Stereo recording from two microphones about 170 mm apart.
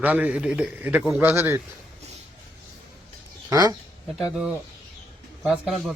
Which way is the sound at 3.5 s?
20° right (ahead or behind).